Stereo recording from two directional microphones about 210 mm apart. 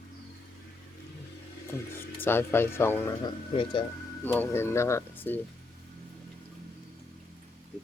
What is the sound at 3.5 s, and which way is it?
Speech, 25° left (ahead or behind).